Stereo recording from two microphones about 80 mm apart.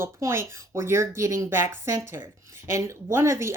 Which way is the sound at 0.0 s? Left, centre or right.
Right.